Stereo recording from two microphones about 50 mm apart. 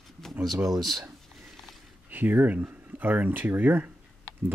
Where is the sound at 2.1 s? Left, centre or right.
Right.